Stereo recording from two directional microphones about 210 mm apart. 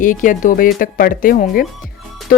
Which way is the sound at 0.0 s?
40° left (ahead or behind).